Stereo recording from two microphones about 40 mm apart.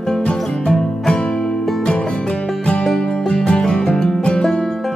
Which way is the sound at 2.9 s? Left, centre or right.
Centre.